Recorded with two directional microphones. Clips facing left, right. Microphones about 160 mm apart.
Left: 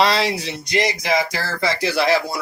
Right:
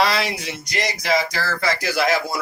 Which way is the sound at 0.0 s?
30° left (ahead or behind).